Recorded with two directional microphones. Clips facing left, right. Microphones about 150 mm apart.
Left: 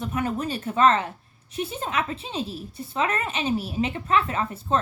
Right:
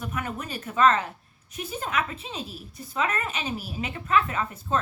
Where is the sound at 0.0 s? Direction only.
30° left (ahead or behind).